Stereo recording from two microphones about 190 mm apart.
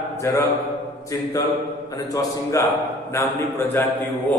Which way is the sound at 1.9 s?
15° left (ahead or behind).